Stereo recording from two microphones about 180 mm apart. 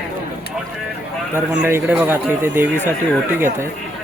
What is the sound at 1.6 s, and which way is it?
Speech, 10° right (ahead or behind).